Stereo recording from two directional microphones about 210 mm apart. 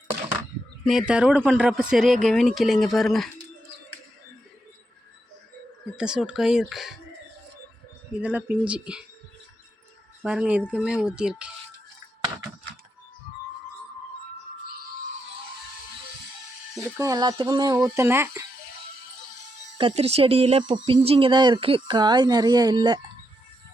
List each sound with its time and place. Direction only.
0.9 s speech: 5° right (ahead or behind)
6.0 s speech: 5° right (ahead or behind)
8.2 s speech: 5° right (ahead or behind)
10.2 s speech: 5° right (ahead or behind)
17.0 s speech: 15° right (ahead or behind)
19.8 s speech: 30° right (ahead or behind)